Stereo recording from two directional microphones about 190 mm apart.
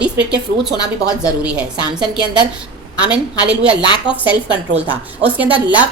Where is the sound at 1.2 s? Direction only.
5° right (ahead or behind).